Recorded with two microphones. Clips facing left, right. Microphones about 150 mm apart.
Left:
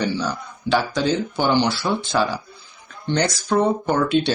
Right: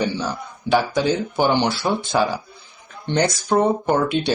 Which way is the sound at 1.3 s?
20° right (ahead or behind).